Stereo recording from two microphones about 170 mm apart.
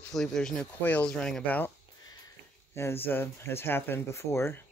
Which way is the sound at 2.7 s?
15° left (ahead or behind).